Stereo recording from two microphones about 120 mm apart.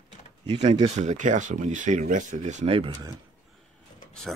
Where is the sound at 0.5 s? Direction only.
65° right (ahead or behind).